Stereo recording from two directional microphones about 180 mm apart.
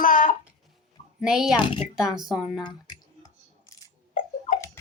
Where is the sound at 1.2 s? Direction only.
5° right (ahead or behind).